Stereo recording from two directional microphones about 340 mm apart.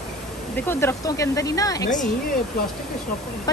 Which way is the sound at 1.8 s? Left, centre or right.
Left.